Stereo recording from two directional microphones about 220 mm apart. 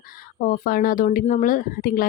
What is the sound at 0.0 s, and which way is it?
Speech, 40° left (ahead or behind).